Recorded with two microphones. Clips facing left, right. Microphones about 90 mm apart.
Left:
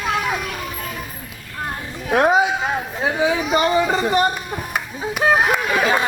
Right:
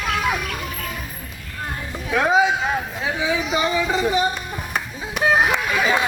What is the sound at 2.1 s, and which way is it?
Speech, 50° left (ahead or behind).